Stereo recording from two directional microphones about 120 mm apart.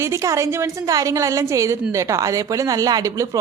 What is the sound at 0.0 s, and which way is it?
A woman's voice, 25° right (ahead or behind).